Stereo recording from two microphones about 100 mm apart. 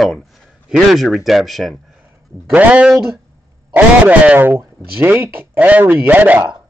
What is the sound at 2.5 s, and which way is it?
Speech, 15° right (ahead or behind).